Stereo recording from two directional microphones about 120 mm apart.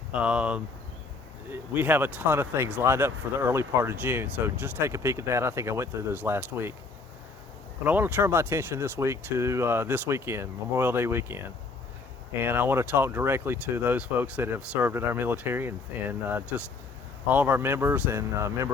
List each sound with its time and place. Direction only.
0.1 s speech: 10° right (ahead or behind)
7.9 s speech: 15° right (ahead or behind)
12.4 s speech: 15° right (ahead or behind)